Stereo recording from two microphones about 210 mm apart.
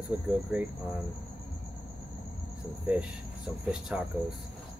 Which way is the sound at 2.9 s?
5° right (ahead or behind).